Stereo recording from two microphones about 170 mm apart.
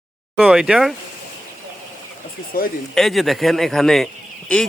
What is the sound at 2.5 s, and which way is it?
Speech, 60° left (ahead or behind).